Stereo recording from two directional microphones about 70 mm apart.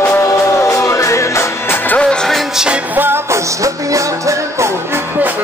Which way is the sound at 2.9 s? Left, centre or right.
Right.